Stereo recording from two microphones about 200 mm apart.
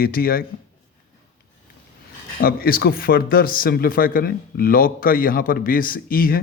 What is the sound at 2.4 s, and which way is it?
A man's voice, 50° left (ahead or behind).